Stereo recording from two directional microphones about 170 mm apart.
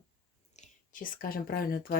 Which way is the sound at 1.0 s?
55° left (ahead or behind).